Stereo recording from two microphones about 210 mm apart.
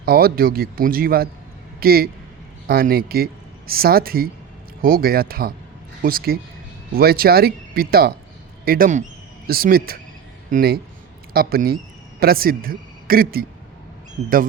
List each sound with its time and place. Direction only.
0.0 s a man's voice: 45° right (ahead or behind)